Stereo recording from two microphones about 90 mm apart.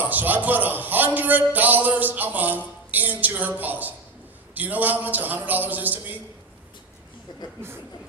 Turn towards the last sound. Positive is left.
turn(degrees=-20)  # may be behind; listen again after turning